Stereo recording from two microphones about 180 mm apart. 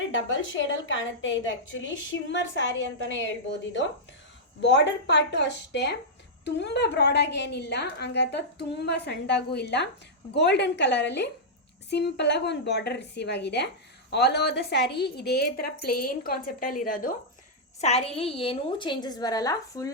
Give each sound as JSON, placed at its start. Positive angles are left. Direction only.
{"t": 0.1, "sound": "a woman's voice", "side_deg": 90}
{"t": 4.6, "sound": "a woman's voice", "side_deg": 75}
{"t": 17.7, "sound": "a woman's voice", "side_deg": 35}